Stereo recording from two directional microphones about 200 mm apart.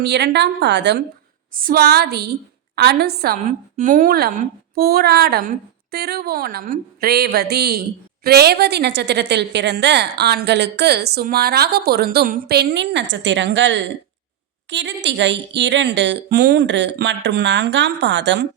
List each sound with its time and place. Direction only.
0.0 s a woman's voice: 55° right (ahead or behind)
1.5 s a woman's voice: 45° right (ahead or behind)
3.3 s a woman's voice: 40° right (ahead or behind); by 18.4 s 65° right (ahead or behind)